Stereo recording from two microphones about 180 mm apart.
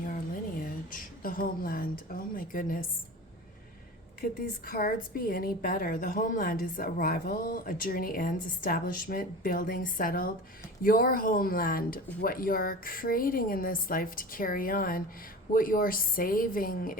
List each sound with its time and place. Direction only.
0.6 s a sound: 50° left (ahead or behind)
2.3 s a woman's voice: 50° left (ahead or behind)
4.2 s a woman's voice: 55° left (ahead or behind)